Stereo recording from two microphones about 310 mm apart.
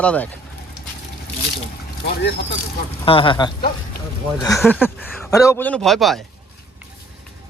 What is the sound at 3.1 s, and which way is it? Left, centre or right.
Speech, centre.